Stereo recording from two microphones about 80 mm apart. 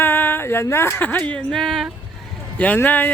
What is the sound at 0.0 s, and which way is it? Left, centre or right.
Speech, left.